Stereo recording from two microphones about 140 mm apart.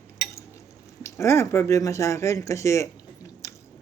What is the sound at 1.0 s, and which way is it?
Speech, 20° left (ahead or behind).